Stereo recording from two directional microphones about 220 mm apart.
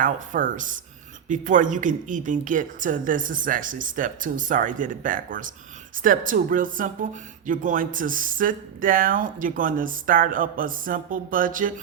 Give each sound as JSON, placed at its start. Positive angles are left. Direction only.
{"t": 0.0, "sound": "speech", "side_deg": -35}